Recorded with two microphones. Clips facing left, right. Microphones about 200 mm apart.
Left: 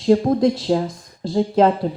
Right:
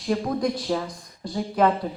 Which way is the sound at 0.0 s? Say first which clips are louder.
Left 9 dB; 25° left (ahead or behind).